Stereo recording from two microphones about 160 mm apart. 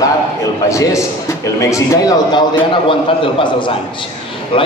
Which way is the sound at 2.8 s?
30° left (ahead or behind).